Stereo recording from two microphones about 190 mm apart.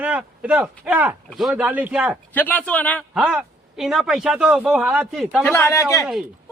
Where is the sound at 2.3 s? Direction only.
10° left (ahead or behind).